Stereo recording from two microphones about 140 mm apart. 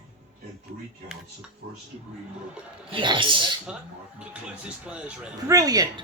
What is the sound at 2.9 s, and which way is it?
Speech, 35° right (ahead or behind).